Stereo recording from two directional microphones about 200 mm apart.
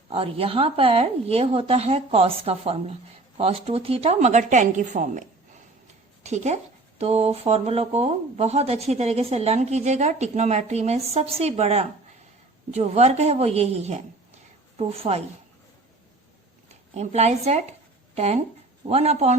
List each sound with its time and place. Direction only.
0.1 s speech: 30° right (ahead or behind)
16.9 s a woman's voice: 35° right (ahead or behind)